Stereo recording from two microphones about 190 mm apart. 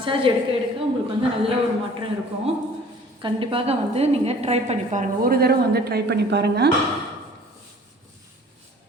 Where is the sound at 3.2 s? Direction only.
30° right (ahead or behind).